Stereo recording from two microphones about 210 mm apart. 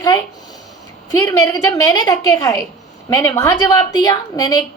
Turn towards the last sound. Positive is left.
turn(degrees=20)  # may be behind; listen again after turning